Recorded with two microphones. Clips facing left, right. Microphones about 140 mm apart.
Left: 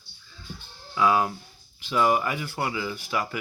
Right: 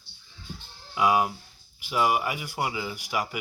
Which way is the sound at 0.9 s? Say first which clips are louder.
Left 1 dB; 15° right (ahead or behind).